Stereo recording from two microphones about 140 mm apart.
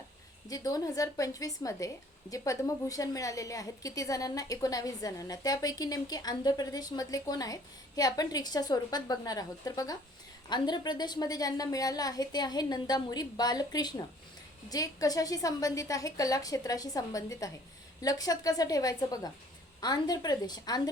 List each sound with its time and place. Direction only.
0.4 s a woman's voice: 25° left (ahead or behind)